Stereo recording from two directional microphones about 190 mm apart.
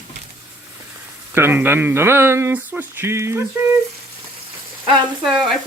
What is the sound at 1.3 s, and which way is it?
Speech, 10° right (ahead or behind).